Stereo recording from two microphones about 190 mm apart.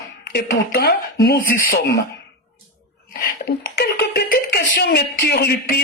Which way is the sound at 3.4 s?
55° left (ahead or behind).